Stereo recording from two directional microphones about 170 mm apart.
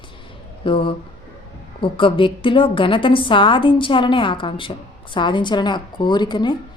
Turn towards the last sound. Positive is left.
turn(degrees=25)  # may be behind; listen again after turning